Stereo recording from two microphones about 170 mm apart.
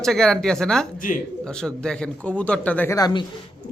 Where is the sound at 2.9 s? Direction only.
25° left (ahead or behind).